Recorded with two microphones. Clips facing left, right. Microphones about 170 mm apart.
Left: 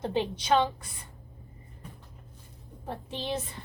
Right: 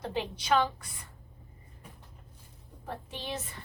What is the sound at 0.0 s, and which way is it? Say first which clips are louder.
Speech: left 5 dB; 25° left (ahead or behind).